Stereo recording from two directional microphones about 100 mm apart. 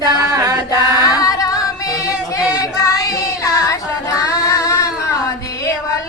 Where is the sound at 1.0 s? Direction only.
35° left (ahead or behind).